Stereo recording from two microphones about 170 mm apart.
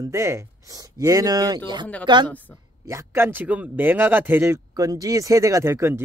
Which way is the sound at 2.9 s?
15° right (ahead or behind).